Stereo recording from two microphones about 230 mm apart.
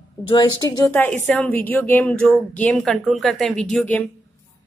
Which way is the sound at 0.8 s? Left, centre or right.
Centre.